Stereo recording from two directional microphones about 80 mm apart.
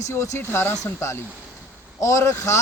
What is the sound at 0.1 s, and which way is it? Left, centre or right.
Speech, left.